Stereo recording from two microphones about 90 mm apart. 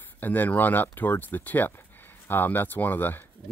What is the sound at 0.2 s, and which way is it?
Speech, 20° left (ahead or behind).